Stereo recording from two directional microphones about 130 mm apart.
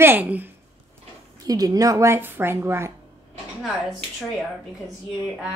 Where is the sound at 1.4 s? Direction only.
30° right (ahead or behind).